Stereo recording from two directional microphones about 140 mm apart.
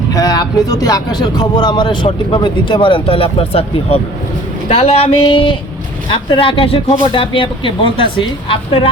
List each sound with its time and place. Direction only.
0.1 s speech: 25° left (ahead or behind)